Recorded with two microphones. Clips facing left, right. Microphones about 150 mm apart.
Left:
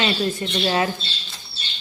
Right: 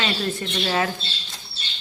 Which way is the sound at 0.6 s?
25° left (ahead or behind).